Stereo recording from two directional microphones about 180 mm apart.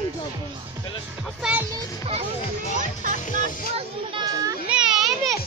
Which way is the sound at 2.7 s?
45° right (ahead or behind).